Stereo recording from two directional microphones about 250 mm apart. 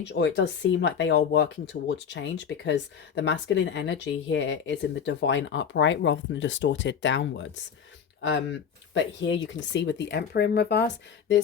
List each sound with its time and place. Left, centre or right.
0.0 s speech: left